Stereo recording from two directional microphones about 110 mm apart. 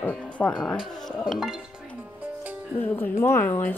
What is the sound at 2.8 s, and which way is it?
Speech, 20° left (ahead or behind).